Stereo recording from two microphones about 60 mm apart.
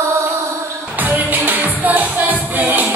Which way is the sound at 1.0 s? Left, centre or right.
Right.